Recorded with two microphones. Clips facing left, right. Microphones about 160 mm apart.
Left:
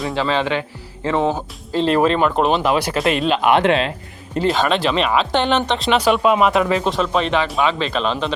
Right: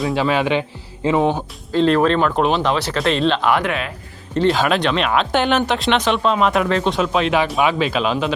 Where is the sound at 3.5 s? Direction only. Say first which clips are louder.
Left 5 dB; 25° left (ahead or behind).